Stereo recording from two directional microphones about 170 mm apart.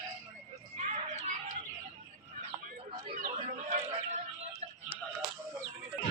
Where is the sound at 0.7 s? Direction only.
40° right (ahead or behind).